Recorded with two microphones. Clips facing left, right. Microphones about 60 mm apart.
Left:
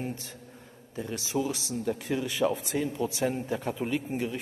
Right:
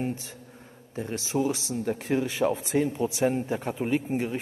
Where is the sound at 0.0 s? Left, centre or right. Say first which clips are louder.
Right 4 dB; right.